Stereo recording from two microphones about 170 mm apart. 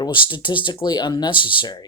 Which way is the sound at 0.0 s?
25° left (ahead or behind).